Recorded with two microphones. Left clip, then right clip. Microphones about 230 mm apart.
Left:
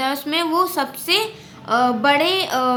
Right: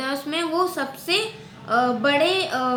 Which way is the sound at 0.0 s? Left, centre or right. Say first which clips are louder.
Left 5 dB; left.